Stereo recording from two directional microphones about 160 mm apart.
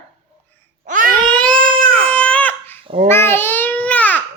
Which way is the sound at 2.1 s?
10° left (ahead or behind).